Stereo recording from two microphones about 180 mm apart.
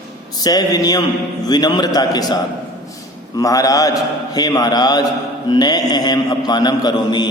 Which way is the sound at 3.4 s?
20° left (ahead or behind).